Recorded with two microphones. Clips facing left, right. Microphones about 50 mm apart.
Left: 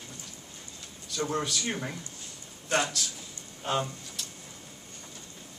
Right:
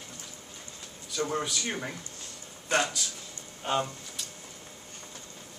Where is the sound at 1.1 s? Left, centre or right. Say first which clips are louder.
Even; centre.